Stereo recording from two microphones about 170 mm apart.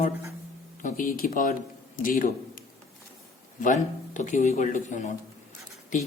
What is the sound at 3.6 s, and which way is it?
Speech, 45° left (ahead or behind).